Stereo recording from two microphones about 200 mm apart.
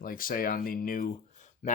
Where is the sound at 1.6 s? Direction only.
35° left (ahead or behind).